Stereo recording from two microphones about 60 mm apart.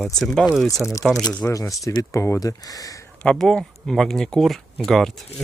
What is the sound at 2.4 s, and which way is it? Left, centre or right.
Speech, left.